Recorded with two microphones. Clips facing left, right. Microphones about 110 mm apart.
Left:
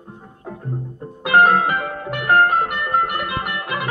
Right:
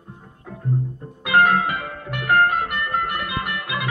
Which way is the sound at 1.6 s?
45° left (ahead or behind).